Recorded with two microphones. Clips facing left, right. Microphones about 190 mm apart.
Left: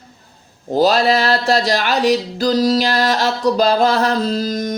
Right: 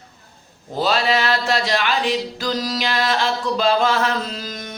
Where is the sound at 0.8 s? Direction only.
40° left (ahead or behind).